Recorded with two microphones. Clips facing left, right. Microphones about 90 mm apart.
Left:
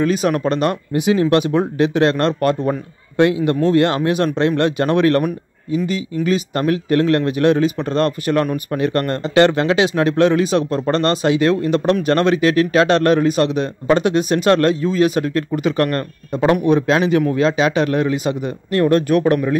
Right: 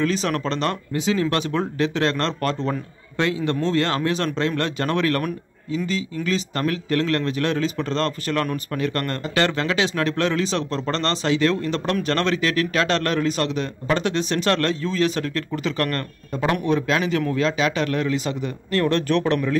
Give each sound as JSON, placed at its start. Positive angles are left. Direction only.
{"t": 0.0, "sound": "speech", "side_deg": 20}